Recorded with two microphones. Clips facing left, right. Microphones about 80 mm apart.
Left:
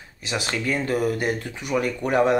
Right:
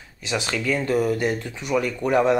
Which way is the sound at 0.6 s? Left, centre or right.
Left.